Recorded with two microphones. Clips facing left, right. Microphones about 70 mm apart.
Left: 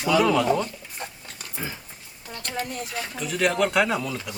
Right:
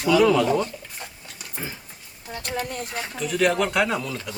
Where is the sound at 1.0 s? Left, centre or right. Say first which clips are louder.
Left 7 dB; left.